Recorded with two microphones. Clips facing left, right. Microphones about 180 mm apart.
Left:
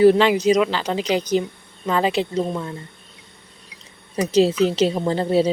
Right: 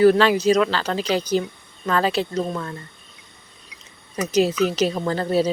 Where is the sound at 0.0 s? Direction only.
20° left (ahead or behind).